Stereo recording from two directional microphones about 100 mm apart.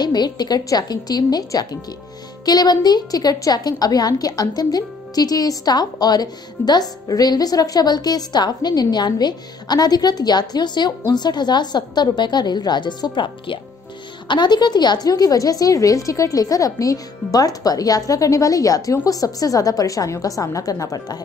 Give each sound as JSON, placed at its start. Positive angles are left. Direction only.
{"t": 0.0, "sound": "a woman's voice", "side_deg": 45}